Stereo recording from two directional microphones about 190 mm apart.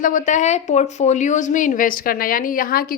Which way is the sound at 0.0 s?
45° left (ahead or behind).